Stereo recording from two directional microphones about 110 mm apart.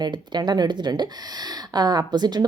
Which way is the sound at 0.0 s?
40° right (ahead or behind).